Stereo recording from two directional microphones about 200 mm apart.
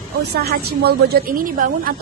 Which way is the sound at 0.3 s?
50° right (ahead or behind).